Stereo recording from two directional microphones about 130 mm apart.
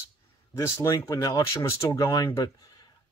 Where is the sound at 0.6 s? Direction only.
25° left (ahead or behind).